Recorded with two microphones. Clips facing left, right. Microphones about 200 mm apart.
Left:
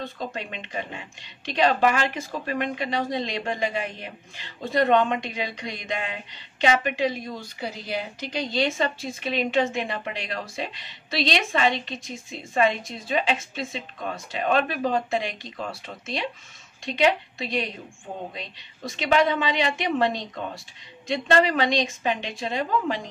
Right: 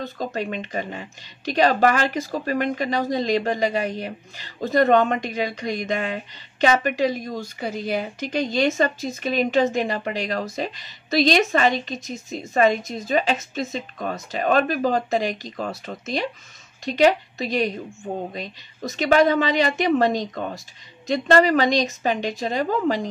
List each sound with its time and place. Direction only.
0.0 s a woman's voice: 40° right (ahead or behind)